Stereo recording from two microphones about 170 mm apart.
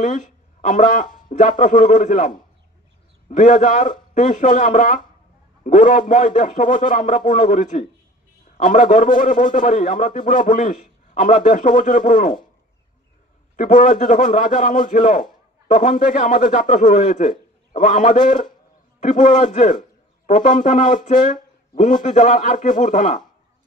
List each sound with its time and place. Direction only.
0.0 s speech: 45° left (ahead or behind)
13.6 s speech: 50° left (ahead or behind)